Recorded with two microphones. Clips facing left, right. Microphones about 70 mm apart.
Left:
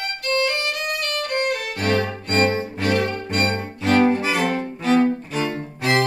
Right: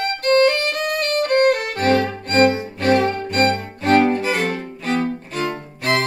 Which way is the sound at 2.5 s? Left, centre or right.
Left.